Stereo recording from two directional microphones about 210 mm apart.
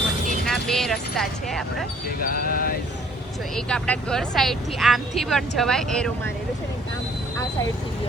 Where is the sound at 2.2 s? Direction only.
45° left (ahead or behind).